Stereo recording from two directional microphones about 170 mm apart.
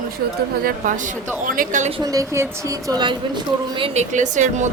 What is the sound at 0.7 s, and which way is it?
A woman's voice, 50° right (ahead or behind).